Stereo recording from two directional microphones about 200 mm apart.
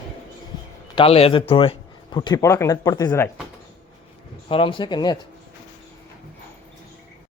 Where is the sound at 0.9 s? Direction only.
30° left (ahead or behind).